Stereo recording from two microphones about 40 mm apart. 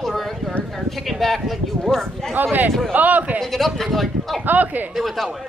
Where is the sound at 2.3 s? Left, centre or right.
Right.